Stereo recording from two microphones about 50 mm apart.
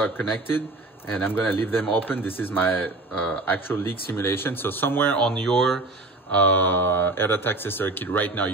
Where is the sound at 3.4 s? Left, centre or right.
Left.